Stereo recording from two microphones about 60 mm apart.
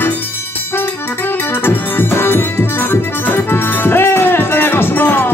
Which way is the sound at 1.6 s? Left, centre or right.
Left.